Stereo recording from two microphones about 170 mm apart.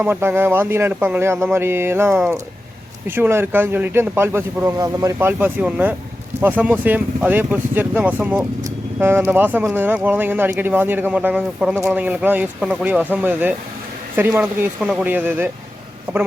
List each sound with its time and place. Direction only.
0.0 s speech: 10° right (ahead or behind)